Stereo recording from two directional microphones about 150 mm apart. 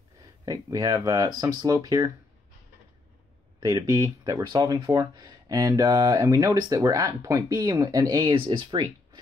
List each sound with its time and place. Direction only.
0.5 s speech: 25° right (ahead or behind)
3.5 s speech: 25° right (ahead or behind)